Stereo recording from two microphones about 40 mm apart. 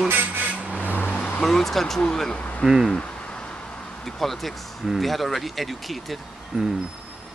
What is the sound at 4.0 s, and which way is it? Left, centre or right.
Speech, centre.